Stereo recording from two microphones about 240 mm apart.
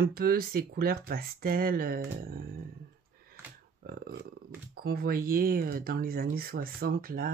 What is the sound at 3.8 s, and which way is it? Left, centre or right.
Speech, right.